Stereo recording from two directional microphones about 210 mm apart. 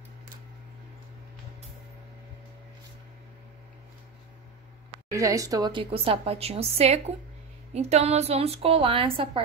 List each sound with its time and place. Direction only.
5.1 s a woman's voice: 15° right (ahead or behind)